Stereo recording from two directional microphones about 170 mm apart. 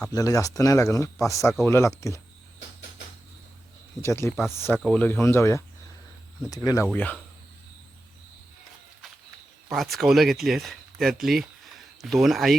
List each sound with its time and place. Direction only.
0.0 s speech: 20° left (ahead or behind)
4.0 s speech: 15° left (ahead or behind)
4.8 s speech: 5° left (ahead or behind)
6.8 s speech: 10° left (ahead or behind)
9.6 s speech: centre (ahead or behind)